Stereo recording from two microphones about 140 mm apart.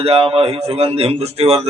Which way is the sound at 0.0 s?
40° right (ahead or behind).